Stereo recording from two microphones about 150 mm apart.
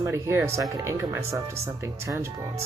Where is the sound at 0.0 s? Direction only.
15° right (ahead or behind).